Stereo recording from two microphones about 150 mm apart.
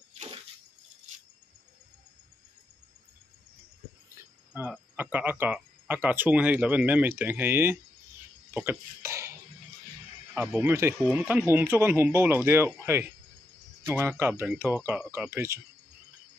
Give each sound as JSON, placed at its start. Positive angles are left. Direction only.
{"t": 4.6, "sound": "speech", "side_deg": -10}
{"t": 8.5, "sound": "a sound", "side_deg": -15}
{"t": 10.6, "sound": "speech", "side_deg": -20}
{"t": 11.1, "sound": "speech", "side_deg": -5}
{"t": 13.8, "sound": "speech", "side_deg": -15}